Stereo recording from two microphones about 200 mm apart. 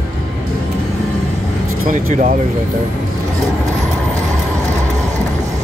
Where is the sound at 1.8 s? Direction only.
40° right (ahead or behind).